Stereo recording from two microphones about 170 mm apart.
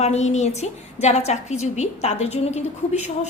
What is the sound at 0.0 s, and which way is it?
A woman's voice, 40° left (ahead or behind).